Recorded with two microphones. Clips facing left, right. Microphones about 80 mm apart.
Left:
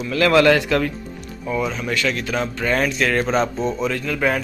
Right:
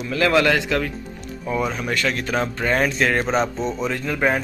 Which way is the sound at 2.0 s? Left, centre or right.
Right.